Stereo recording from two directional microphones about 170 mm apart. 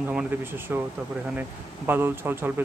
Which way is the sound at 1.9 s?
15° right (ahead or behind).